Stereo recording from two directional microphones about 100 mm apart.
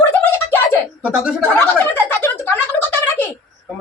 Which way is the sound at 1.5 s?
15° left (ahead or behind).